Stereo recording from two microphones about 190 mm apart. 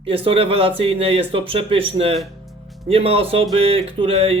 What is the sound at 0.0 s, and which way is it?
A man's voice, 30° right (ahead or behind).